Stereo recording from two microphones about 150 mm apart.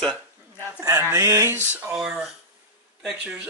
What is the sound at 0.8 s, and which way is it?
Speech, 20° right (ahead or behind).